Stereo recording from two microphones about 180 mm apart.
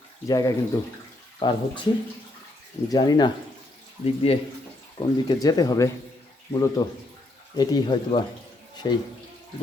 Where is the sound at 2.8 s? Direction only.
20° left (ahead or behind).